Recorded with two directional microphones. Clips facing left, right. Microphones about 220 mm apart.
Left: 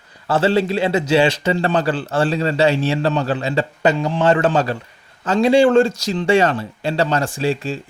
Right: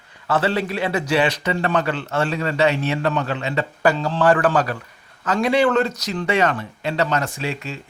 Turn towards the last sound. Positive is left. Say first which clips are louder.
# left 7 dB
turn(degrees=30)  # may be behind; listen again after turning